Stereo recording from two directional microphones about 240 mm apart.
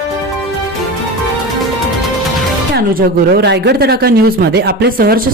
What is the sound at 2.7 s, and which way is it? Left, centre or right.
Speech, right.